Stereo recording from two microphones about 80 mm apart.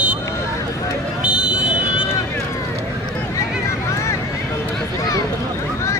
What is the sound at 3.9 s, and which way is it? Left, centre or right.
Vehicle, left.